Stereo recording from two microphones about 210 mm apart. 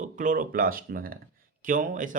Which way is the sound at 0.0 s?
40° right (ahead or behind).